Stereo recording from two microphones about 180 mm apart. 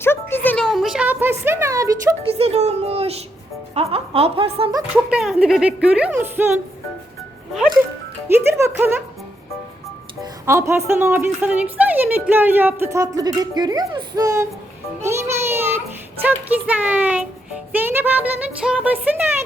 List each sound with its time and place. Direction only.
0.0 s a sound: 15° left (ahead or behind); by 2.1 s 15° right (ahead or behind)
2.2 s speech: 35° right (ahead or behind)
5.1 s a woman's voice: centre (ahead or behind)
8.3 s speech: 15° right (ahead or behind)
10.4 s a woman's voice: 15° right (ahead or behind)
15.0 s child singing: 15° right (ahead or behind)
16.2 s a woman's voice: 10° right (ahead or behind)